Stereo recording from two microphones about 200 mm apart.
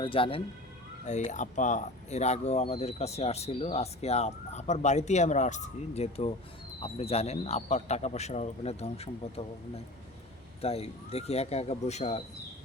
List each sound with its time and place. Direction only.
0.0 s speech: 25° left (ahead or behind)